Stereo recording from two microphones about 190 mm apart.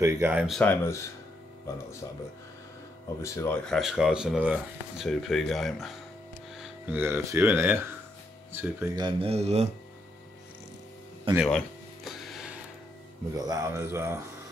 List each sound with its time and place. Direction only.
0.0 s speech: 10° right (ahead or behind)
0.6 s speech: 10° left (ahead or behind)
3.2 s speech: 15° left (ahead or behind)
3.6 s speech: centre (ahead or behind)
6.6 s speech: 10° right (ahead or behind)
8.9 s speech: 25° right (ahead or behind)
11.3 s a sound: centre (ahead or behind)
13.3 s speech: 15° right (ahead or behind)